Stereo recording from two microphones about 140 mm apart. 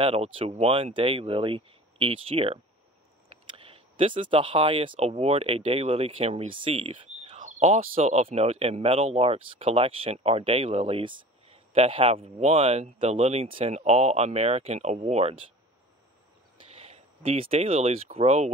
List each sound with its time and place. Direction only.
0.0 s speech: 40° right (ahead or behind)
7.3 s speech: 60° right (ahead or behind)
16.5 s speech: 45° right (ahead or behind)